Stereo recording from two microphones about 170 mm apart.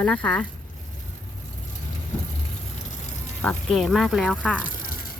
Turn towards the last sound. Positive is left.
turn(degrees=55)  # may be behind; listen again after turning